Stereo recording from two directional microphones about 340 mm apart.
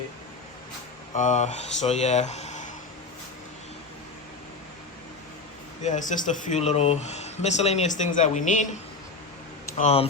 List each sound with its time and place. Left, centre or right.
1.1 s speech: left
5.8 s speech: left
9.7 s speech: centre